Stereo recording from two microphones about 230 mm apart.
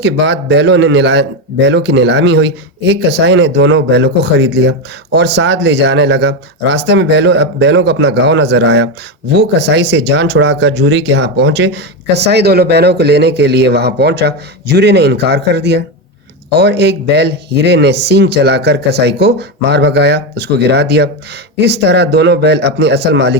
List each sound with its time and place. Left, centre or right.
0.0 s speech: right